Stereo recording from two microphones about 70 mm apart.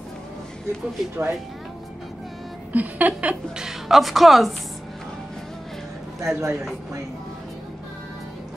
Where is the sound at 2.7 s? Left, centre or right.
Right.